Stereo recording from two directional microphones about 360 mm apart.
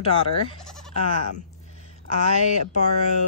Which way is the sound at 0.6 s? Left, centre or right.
Centre.